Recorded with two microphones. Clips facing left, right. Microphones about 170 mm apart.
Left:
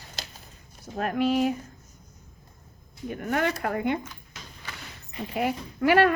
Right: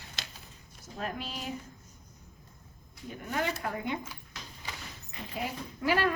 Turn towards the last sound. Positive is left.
turn(degrees=65)  # may be behind; listen again after turning